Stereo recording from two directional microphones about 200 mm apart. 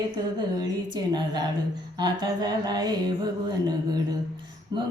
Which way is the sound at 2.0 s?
20° right (ahead or behind).